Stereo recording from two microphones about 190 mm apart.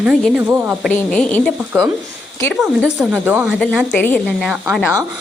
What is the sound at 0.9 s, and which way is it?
Speech, 5° left (ahead or behind).